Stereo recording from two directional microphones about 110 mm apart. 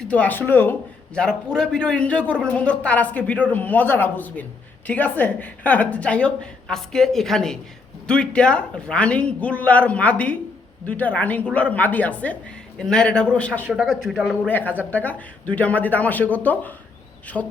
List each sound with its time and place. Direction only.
0.0 s a man's voice: 10° left (ahead or behind)
13.8 s speech: centre (ahead or behind)
14.4 s a man's voice: 15° left (ahead or behind)
17.3 s speech: centre (ahead or behind)